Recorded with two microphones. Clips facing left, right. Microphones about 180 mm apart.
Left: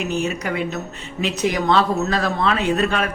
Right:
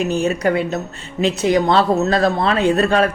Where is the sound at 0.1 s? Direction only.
35° right (ahead or behind).